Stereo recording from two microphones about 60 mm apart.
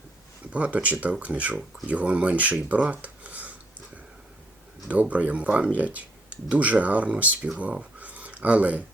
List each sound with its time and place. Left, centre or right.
0.5 s speech: right
4.9 s speech: right